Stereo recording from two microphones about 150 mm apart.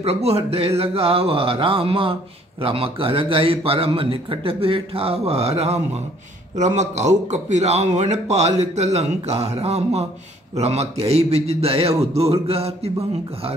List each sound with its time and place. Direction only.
0.0 s a man's voice: 40° right (ahead or behind)